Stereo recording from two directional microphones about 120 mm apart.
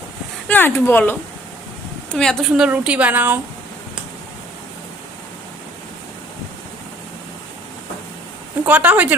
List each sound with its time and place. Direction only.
0.4 s speech: 15° left (ahead or behind)
2.0 s a woman's voice: 5° left (ahead or behind); by 3.3 s 15° right (ahead or behind)
8.6 s a woman's voice: 15° right (ahead or behind)